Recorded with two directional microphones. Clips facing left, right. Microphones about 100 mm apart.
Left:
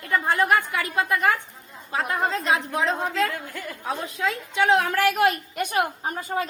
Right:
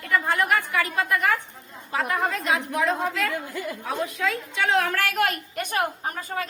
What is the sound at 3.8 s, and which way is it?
A woman's voice, 30° left (ahead or behind).